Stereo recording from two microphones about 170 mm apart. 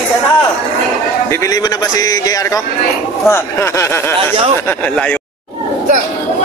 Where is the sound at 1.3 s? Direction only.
20° left (ahead or behind).